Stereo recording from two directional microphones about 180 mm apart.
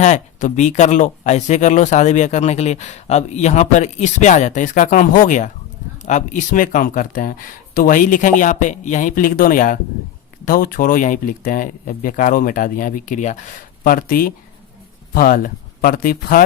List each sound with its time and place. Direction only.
0.0 s speech: 40° left (ahead or behind)